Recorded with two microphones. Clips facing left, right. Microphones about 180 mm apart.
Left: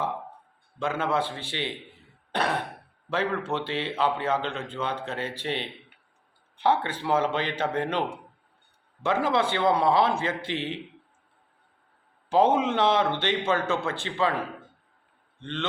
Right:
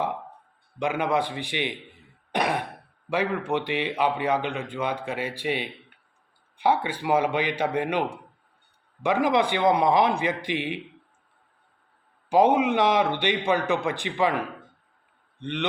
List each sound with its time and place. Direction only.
0.8 s a man's voice: 15° right (ahead or behind)
9.0 s a man's voice: 15° right (ahead or behind)
12.3 s a man's voice: 15° right (ahead or behind)